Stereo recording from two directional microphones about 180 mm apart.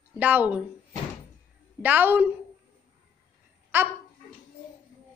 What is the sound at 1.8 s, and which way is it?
Speech, 10° right (ahead or behind).